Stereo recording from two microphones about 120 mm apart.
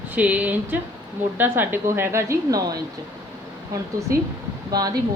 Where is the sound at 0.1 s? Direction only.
10° right (ahead or behind); by 2.7 s 30° right (ahead or behind).